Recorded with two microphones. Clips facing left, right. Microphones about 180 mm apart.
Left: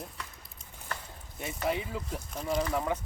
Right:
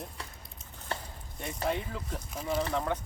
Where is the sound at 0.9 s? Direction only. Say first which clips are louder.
Right 3 dB; 30° right (ahead or behind).